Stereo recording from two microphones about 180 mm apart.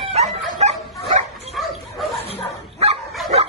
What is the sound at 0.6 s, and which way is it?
Dog, 35° right (ahead or behind).